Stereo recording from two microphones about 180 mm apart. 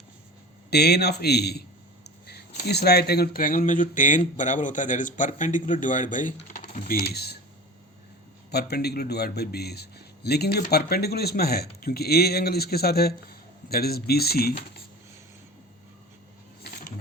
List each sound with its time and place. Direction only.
0.7 s a man's voice: 65° left (ahead or behind)
2.6 s speech: 65° left (ahead or behind)
8.4 s a man's voice: 65° left (ahead or behind)